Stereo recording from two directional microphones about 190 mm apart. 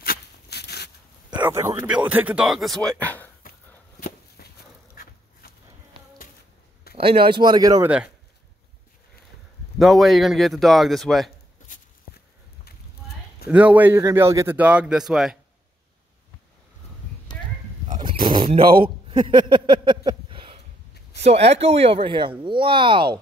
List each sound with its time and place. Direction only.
0.0 s a sound: 55° left (ahead or behind)
1.3 s speech: 20° right (ahead or behind); by 3.3 s 10° left (ahead or behind)
4.4 s dog: 55° left (ahead or behind)
7.0 s speech: 25° right (ahead or behind)
9.8 s speech: centre (ahead or behind)
13.5 s a man's voice: 10° right (ahead or behind)
17.3 s a sound: 20° left (ahead or behind)
17.9 s a sound: 25° right (ahead or behind)
21.2 s speech: 35° right (ahead or behind)